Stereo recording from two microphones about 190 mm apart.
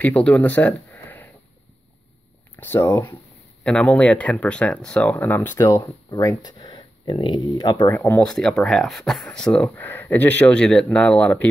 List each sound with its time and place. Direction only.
0.0 s speech: 10° left (ahead or behind)
2.5 s speech: 10° left (ahead or behind)
7.9 s speech: 10° left (ahead or behind)